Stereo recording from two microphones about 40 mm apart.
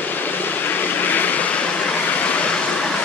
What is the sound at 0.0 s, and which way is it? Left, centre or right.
Vehicle, left.